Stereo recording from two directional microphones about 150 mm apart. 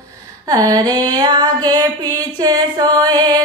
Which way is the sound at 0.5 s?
25° right (ahead or behind).